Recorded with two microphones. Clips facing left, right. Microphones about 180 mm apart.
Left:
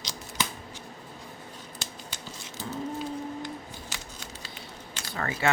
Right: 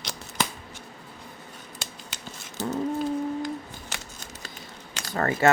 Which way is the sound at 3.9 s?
50° right (ahead or behind).